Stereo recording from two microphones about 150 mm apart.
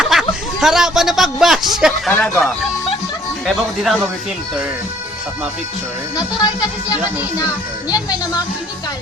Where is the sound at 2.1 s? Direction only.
10° left (ahead or behind).